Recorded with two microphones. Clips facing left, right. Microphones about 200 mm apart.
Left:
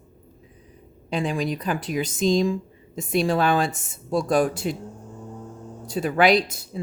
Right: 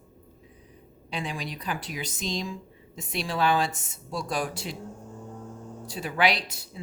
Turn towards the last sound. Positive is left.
turn(degrees=50)  # may be behind; listen again after turning